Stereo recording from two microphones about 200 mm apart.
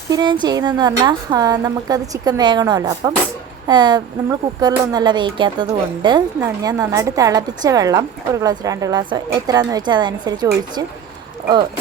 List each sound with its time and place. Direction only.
0.1 s a woman's voice: 20° right (ahead or behind)